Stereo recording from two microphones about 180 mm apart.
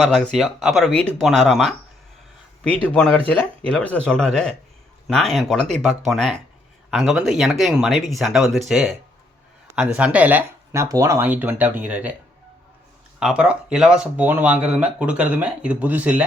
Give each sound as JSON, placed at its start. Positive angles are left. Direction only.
{"t": 0.0, "sound": "speech", "side_deg": 5}
{"t": 2.8, "sound": "speech", "side_deg": 5}
{"t": 13.1, "sound": "speech", "side_deg": -5}